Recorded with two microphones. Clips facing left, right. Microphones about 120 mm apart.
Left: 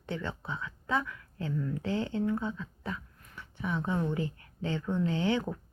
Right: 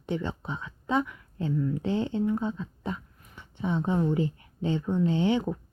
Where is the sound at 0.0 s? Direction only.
20° right (ahead or behind).